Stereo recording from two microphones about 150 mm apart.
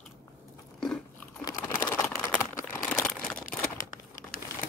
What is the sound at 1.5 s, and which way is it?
Typing, 20° left (ahead or behind).